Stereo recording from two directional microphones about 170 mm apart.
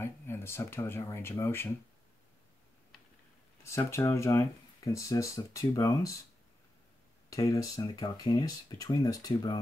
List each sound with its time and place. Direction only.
0.0 s speech: 15° left (ahead or behind)
3.6 s speech: 15° left (ahead or behind)
7.2 s speech: 20° left (ahead or behind)